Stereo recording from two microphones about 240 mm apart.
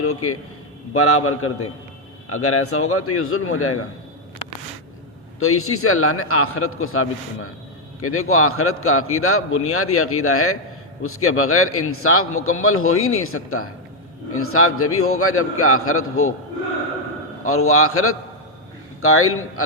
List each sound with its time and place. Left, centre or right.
0.0 s a man's voice: left
5.4 s a man's voice: left
17.4 s a man's voice: left